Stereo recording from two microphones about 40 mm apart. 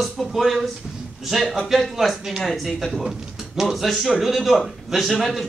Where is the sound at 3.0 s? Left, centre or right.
Centre.